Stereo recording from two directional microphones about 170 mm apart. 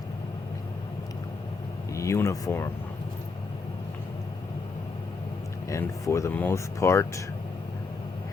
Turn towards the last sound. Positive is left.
turn(degrees=15)  # may be behind; listen again after turning